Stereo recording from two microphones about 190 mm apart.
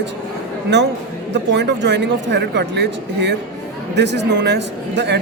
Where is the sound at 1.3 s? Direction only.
65° right (ahead or behind).